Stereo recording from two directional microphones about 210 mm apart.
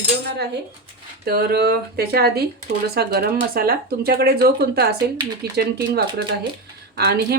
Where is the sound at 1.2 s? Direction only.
50° right (ahead or behind).